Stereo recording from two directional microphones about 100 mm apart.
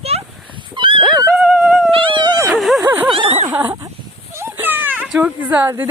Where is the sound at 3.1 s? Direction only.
90° right.